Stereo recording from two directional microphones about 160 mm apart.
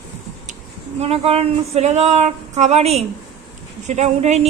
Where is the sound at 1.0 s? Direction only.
40° right (ahead or behind).